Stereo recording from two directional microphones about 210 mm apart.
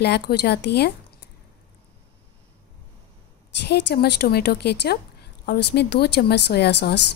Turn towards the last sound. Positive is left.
turn(degrees=50)  # may be behind; listen again after turning